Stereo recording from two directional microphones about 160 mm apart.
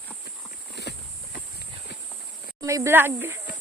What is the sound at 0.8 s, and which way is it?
Clip-clop, 90° left.